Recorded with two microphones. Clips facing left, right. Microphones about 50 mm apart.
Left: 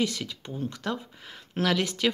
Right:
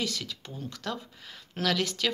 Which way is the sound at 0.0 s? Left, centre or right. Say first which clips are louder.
Left 5 dB; left.